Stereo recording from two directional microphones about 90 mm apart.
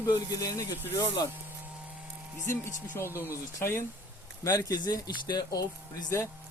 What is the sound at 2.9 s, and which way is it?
Speech, 30° left (ahead or behind).